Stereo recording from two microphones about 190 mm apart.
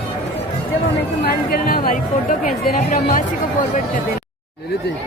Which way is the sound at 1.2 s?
50° left (ahead or behind).